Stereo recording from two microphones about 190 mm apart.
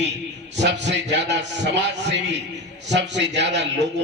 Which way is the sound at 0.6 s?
65° right (ahead or behind).